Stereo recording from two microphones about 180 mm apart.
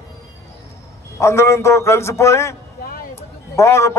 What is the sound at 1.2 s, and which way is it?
A man's voice, 15° left (ahead or behind).